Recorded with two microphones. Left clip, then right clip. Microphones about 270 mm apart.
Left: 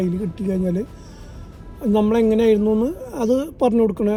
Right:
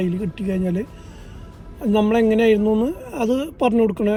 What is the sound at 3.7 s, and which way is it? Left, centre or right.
Speech, right.